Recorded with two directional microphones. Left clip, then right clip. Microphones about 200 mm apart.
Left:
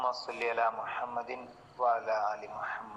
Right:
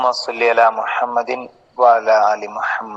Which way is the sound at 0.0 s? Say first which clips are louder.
Right 17 dB; 50° right (ahead or behind).